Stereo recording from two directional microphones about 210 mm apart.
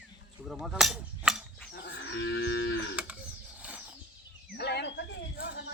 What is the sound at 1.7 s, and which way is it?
Moo, 55° left (ahead or behind).